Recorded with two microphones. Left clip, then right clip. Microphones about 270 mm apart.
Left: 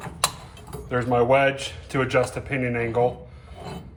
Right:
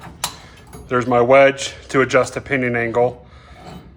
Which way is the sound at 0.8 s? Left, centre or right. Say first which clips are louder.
Right 6 dB; right.